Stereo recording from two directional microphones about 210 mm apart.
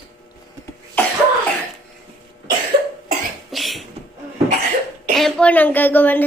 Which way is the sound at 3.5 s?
Centre (ahead or behind).